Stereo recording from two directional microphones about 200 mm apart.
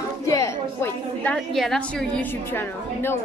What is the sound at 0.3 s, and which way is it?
A woman's voice, 15° left (ahead or behind).